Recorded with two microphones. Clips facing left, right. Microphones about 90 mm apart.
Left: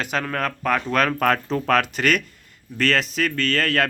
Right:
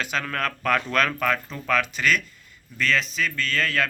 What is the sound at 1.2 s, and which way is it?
Speech, 50° left (ahead or behind).